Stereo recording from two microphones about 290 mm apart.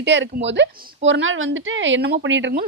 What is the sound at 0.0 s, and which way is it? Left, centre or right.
A woman's voice, right.